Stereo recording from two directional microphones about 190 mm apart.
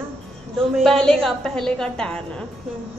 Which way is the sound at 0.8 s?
5° left (ahead or behind).